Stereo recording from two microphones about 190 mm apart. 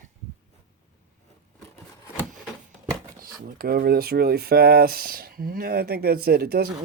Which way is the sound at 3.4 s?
50° right (ahead or behind).